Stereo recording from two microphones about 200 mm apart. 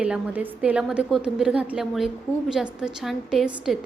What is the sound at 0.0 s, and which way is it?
A woman's voice, 5° right (ahead or behind).